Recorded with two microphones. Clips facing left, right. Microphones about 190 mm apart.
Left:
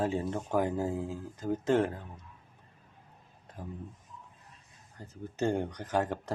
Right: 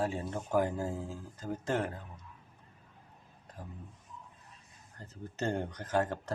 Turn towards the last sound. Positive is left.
turn(degrees=15)  # may be behind; listen again after turning